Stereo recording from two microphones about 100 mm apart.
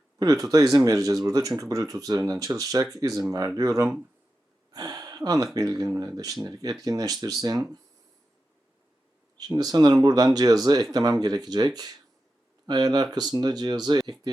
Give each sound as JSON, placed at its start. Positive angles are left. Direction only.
{"t": 0.4, "sound": "speech", "side_deg": -35}
{"t": 4.7, "sound": "a sound", "side_deg": -40}
{"t": 5.5, "sound": "speech", "side_deg": -40}
{"t": 9.4, "sound": "speech", "side_deg": -40}